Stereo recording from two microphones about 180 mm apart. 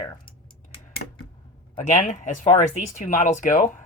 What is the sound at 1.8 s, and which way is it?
Speech, 40° left (ahead or behind).